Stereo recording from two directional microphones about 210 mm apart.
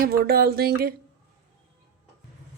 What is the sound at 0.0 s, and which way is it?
Speech, 45° right (ahead or behind).